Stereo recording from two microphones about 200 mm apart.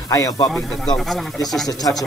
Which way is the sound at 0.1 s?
15° left (ahead or behind).